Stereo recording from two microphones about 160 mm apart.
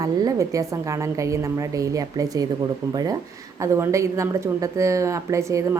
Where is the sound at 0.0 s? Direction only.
25° right (ahead or behind).